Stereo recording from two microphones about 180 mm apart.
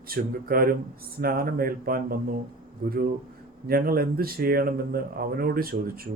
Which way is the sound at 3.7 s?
55° right (ahead or behind).